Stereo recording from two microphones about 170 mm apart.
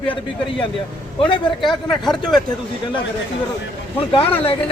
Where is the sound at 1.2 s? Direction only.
30° left (ahead or behind).